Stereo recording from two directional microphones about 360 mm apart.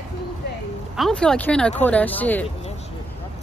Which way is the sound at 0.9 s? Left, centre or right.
Centre.